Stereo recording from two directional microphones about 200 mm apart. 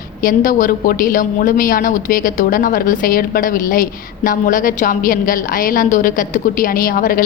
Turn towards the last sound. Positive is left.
turn(degrees=45)  # may be behind; listen again after turning